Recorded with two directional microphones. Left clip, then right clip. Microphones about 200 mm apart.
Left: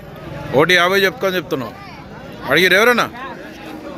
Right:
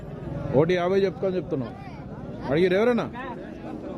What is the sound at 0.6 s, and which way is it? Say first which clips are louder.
A man's voice: left 9 dB; centre (ahead or behind).